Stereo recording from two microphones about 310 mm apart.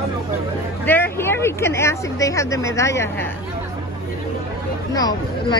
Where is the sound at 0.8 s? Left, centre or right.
Centre.